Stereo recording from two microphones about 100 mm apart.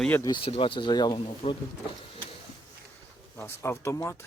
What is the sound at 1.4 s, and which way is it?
Speech, 90° left.